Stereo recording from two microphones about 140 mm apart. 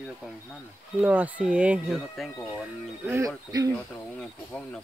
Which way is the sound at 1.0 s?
10° right (ahead or behind).